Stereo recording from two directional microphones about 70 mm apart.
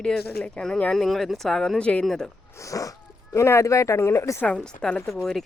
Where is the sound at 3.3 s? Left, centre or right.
Left.